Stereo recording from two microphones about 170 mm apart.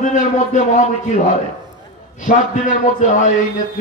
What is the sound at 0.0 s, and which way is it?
Speech, 45° left (ahead or behind).